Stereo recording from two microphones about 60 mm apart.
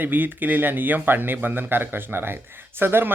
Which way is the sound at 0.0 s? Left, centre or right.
Right.